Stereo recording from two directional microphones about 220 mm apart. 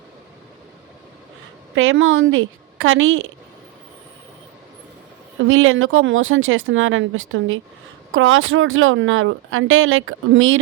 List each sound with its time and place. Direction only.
1.7 s speech: 65° right (ahead or behind)
5.5 s speech: 65° right (ahead or behind)